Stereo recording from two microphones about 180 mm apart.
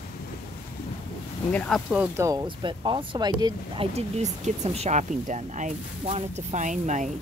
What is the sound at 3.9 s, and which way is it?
Speech, 40° right (ahead or behind).